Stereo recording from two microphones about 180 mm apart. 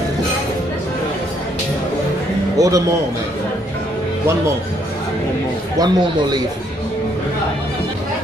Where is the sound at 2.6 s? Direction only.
20° right (ahead or behind).